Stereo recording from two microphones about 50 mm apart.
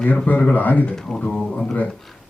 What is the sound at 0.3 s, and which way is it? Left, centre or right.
Speech, left.